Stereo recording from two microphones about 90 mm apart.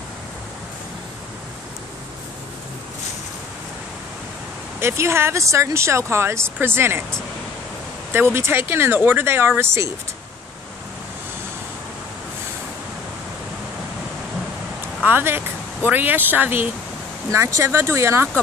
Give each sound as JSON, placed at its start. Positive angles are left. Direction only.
{"t": 4.7, "sound": "speech", "side_deg": -30}
{"t": 8.1, "sound": "speech", "side_deg": -25}
{"t": 15.0, "sound": "speech", "side_deg": -20}
{"t": 17.3, "sound": "speech", "side_deg": -35}